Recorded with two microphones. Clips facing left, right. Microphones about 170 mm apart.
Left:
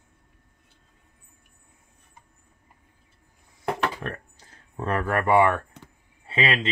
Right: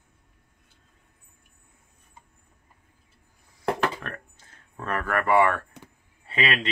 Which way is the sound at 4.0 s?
30° left (ahead or behind).